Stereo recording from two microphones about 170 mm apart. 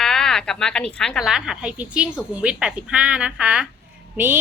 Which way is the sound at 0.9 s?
5° left (ahead or behind).